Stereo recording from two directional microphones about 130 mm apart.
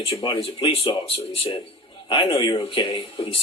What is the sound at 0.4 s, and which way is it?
Speech, 45° left (ahead or behind).